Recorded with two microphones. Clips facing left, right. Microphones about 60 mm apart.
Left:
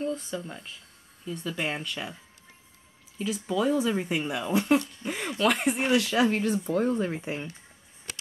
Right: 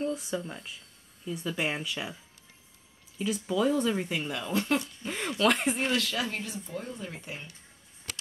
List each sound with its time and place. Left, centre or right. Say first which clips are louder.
0.0 s speech: even; centre
3.2 s speech: even; centre
5.8 s speech: left 4 dB; centre
6.1 s speech: left 9 dB; left
6.6 s speech: left 12 dB; left
7.2 s speech: left 8 dB; left